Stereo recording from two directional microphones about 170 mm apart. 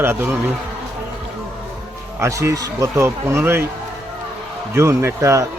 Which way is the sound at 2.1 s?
15° right (ahead or behind).